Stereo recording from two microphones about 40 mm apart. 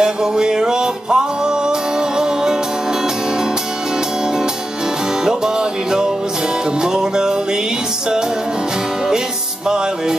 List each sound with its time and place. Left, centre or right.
0.0 s music: centre
5.2 s music: centre